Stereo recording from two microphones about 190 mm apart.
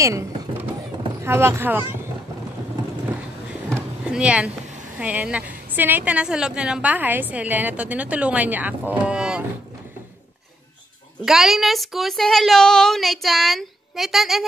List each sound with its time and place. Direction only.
0.0 s a woman's voice: 15° right (ahead or behind)
3.7 s a sound: 5° right (ahead or behind)
4.9 s a woman's voice: 5° right (ahead or behind)
11.2 s a woman's voice: centre (ahead or behind)